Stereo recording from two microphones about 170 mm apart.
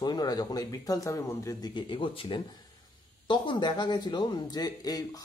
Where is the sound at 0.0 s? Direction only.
25° left (ahead or behind).